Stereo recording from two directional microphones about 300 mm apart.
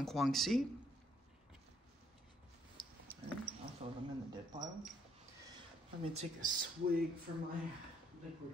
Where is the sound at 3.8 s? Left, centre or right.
Right.